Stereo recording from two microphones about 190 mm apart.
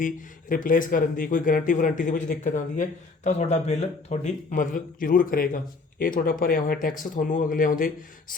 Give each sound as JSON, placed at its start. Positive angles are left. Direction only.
{"t": 0.0, "sound": "speech", "side_deg": 45}